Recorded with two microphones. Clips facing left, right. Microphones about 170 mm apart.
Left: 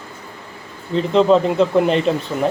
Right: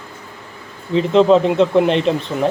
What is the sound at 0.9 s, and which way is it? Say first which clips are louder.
Speech: right 2 dB; centre (ahead or behind).